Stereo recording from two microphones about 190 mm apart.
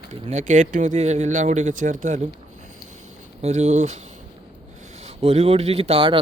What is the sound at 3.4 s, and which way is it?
Speech, 35° right (ahead or behind).